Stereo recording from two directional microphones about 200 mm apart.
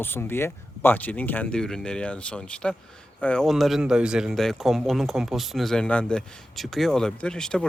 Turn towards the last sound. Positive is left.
turn(degrees=5)  # may be behind; listen again after turning